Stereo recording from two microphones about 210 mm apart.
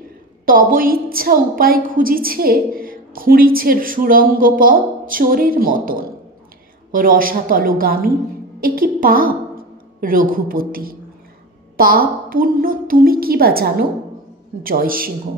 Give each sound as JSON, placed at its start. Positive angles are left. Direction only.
{"t": 0.5, "sound": "a woman's voice", "side_deg": -40}